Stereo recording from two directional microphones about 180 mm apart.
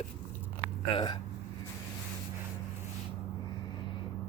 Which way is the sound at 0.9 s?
25° left (ahead or behind).